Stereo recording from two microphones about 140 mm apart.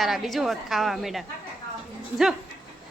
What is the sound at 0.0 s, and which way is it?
A woman's voice, centre (ahead or behind).